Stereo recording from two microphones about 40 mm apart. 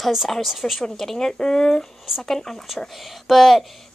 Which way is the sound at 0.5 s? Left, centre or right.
Centre.